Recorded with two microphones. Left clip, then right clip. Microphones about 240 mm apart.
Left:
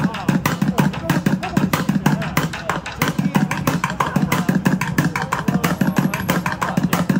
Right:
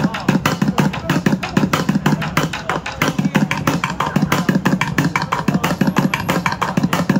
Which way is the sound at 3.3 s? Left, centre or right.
Centre.